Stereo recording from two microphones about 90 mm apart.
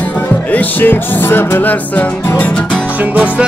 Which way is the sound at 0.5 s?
25° left (ahead or behind).